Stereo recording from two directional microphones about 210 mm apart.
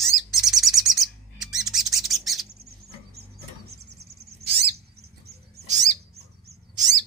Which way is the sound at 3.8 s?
50° right (ahead or behind).